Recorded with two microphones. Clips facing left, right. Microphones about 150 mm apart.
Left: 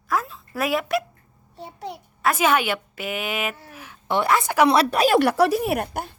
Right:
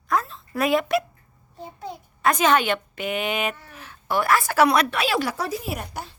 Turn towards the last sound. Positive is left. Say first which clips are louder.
# left 7 dB
turn(degrees=55)  # may be behind; listen again after turning